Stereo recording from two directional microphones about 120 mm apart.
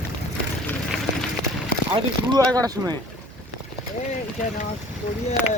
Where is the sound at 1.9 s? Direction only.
35° right (ahead or behind).